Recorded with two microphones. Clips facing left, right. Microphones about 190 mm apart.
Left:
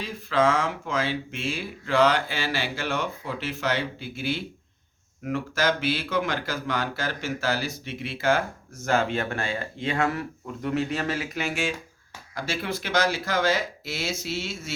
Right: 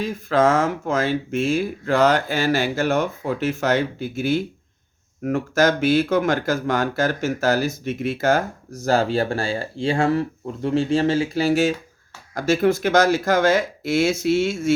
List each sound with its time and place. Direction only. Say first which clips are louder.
0.0 s speech: right 5 dB; 45° right (ahead or behind)